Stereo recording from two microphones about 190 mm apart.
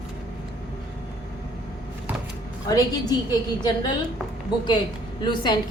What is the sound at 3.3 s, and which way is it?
Speech, 25° left (ahead or behind).